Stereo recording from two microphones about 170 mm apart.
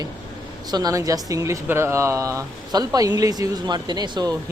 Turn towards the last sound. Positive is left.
turn(degrees=-25)  # may be behind; listen again after turning